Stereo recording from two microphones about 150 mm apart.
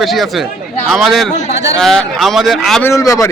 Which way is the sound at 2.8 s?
20° left (ahead or behind).